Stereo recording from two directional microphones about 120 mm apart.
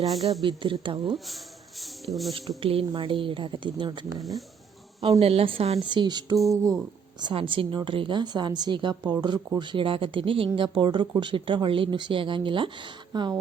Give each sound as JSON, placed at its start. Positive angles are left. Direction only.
{"t": 0.0, "sound": "a woman's voice", "side_deg": 0}
{"t": 0.4, "sound": "speech", "side_deg": -45}
{"t": 1.8, "sound": "speech", "side_deg": 0}
{"t": 2.6, "sound": "speech", "side_deg": -50}
{"t": 4.2, "sound": "a woman's voice", "side_deg": 0}
{"t": 5.2, "sound": "a woman's voice", "side_deg": -55}
{"t": 5.9, "sound": "a woman's voice", "side_deg": -40}